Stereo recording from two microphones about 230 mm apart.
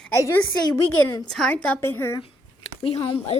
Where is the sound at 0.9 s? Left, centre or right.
Left.